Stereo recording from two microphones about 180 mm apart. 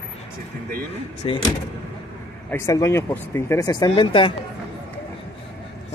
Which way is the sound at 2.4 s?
15° left (ahead or behind).